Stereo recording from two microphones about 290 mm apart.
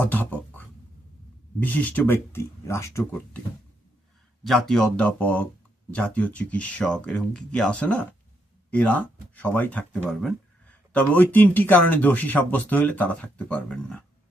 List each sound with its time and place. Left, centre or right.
0.0 s a sound: centre
1.5 s speech: centre
4.4 s speech: centre